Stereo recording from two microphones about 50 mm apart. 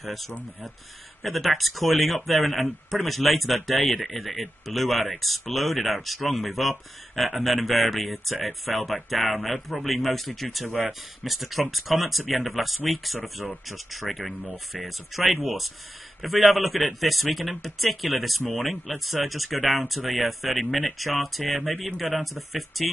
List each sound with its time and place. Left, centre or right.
0.0 s speech: centre
14.3 s speech: right
14.9 s speech: centre